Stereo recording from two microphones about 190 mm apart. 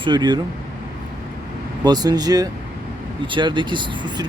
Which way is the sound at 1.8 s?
20° right (ahead or behind).